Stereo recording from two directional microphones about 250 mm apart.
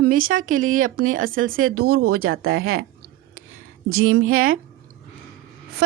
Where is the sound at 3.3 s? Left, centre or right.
Right.